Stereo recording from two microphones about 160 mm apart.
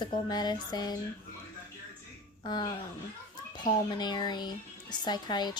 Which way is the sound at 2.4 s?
25° left (ahead or behind).